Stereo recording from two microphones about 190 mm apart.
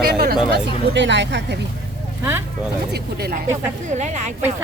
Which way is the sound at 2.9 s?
55° right (ahead or behind).